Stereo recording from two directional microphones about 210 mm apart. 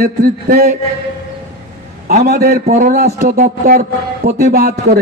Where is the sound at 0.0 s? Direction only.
45° right (ahead or behind).